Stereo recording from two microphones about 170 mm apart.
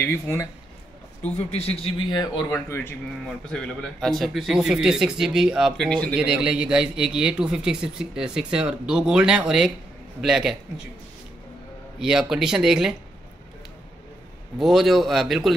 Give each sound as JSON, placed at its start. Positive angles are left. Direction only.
{"t": 0.0, "sound": "speech", "side_deg": 15}
{"t": 1.3, "sound": "a man's voice", "side_deg": 40}
{"t": 3.3, "sound": "a man's voice", "side_deg": 5}
{"t": 6.1, "sound": "a man's voice", "side_deg": -5}
{"t": 12.0, "sound": "a man's voice", "side_deg": -5}
{"t": 14.6, "sound": "a man's voice", "side_deg": 0}